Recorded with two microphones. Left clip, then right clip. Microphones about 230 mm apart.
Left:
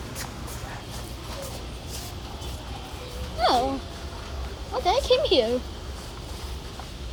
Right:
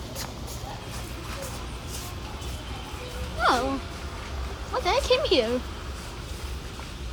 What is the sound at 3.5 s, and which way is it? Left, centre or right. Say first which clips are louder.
Speech: left 1 dB; right.